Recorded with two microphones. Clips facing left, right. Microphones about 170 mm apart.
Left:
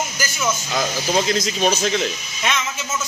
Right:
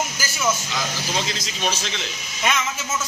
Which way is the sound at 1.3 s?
45° left (ahead or behind).